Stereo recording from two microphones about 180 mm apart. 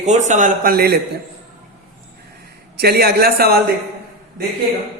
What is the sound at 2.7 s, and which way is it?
Speech, 60° right (ahead or behind).